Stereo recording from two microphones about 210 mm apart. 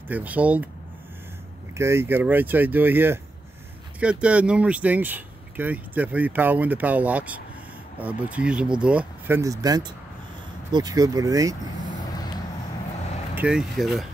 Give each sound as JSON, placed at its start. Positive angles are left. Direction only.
{"t": 0.1, "sound": "speech", "side_deg": -5}
{"t": 1.8, "sound": "speech", "side_deg": -10}
{"t": 13.3, "sound": "speech", "side_deg": -5}